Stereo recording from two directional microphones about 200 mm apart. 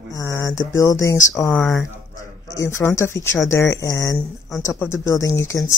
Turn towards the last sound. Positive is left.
turn(degrees=15)  # may be behind; listen again after turning